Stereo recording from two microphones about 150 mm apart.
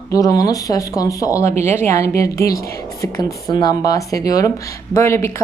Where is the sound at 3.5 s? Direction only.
25° left (ahead or behind).